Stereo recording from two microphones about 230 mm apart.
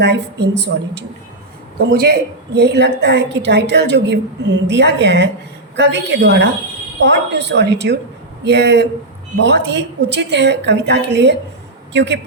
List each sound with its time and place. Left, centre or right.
0.0 s a woman's voice: right